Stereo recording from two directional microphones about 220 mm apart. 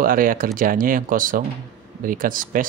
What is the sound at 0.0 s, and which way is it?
Speech, 40° right (ahead or behind).